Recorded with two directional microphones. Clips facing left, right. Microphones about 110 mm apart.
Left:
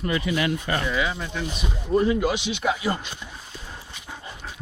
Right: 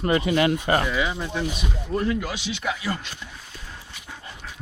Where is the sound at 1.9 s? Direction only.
20° left (ahead or behind).